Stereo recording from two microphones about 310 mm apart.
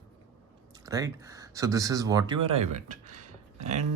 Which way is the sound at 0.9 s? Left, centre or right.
Centre.